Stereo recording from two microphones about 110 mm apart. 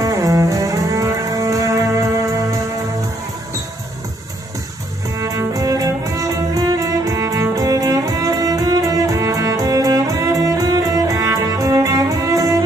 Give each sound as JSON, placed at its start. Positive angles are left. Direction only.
{"t": 0.0, "sound": "cello", "side_deg": -30}
{"t": 5.1, "sound": "music", "side_deg": -30}